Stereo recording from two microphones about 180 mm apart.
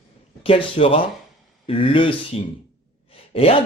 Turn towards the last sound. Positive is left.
turn(degrees=30)  # may be behind; listen again after turning